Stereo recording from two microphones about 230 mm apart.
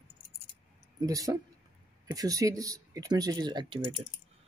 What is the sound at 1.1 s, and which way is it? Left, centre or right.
Speech, centre.